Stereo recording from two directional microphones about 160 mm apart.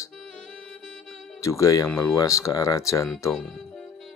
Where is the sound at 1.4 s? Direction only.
20° left (ahead or behind).